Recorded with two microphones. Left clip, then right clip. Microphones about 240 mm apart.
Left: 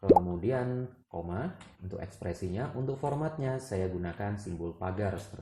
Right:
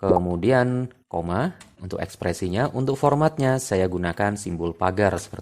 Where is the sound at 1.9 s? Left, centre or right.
Right.